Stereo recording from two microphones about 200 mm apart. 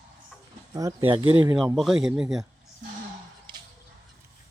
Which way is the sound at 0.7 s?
15° right (ahead or behind).